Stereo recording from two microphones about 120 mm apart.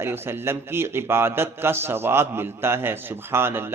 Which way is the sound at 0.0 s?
20° right (ahead or behind).